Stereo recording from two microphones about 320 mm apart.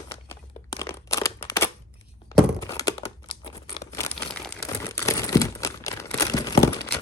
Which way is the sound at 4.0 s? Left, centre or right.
Centre.